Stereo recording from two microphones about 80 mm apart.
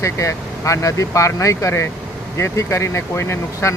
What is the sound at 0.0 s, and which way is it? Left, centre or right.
Speech, left.